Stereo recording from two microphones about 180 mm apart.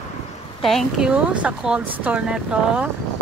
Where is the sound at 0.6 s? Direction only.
Centre (ahead or behind).